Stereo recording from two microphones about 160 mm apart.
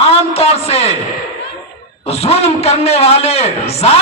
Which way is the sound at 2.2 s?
40° left (ahead or behind).